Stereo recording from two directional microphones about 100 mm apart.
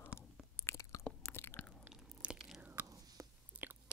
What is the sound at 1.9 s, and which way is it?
Crunch, 10° right (ahead or behind).